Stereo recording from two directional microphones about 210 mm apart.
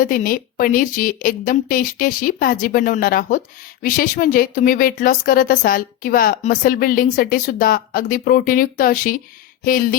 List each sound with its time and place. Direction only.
0.0 s speech: 40° left (ahead or behind)